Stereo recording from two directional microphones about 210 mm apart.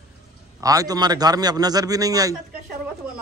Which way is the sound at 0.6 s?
15° right (ahead or behind).